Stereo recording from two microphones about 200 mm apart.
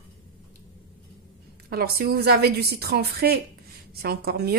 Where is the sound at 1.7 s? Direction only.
50° right (ahead or behind).